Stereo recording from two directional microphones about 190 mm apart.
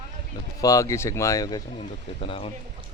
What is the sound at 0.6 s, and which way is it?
Speech, 15° left (ahead or behind).